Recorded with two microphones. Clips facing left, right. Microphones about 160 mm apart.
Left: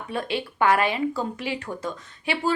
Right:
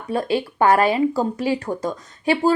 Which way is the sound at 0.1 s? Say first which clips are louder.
Right 7 dB; 40° right (ahead or behind).